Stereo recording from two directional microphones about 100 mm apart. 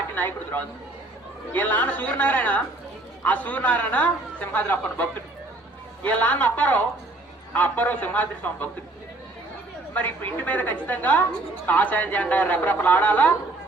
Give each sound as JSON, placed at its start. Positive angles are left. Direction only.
{"t": 0.2, "sound": "a man's voice", "side_deg": 20}
{"t": 9.9, "sound": "a man's voice", "side_deg": 15}